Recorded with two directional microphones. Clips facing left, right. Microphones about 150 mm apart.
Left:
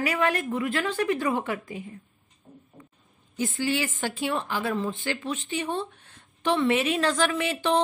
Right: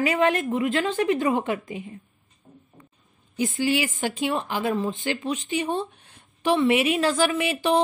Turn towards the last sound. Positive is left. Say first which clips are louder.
# right 2 dB
turn(degrees=-10)  # may be behind; listen again after turning